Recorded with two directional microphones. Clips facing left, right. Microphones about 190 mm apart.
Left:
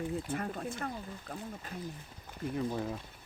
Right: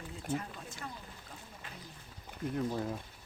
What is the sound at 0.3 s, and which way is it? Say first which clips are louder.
Speech: left 2 dB; 55° left (ahead or behind).